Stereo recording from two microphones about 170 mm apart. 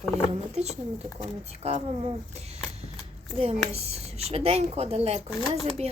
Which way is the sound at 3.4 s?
35° right (ahead or behind).